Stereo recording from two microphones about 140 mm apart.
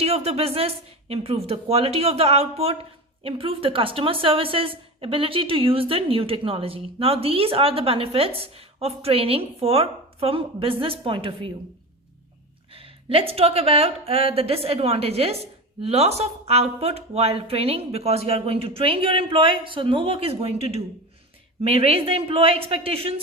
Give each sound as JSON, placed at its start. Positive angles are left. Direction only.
{"t": 0.0, "sound": "a woman's voice", "side_deg": -45}
{"t": 12.7, "sound": "speech", "side_deg": -40}